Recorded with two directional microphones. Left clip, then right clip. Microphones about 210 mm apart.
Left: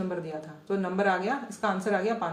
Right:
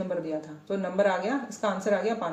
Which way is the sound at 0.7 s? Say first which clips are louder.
Right 1 dB; 25° left (ahead or behind).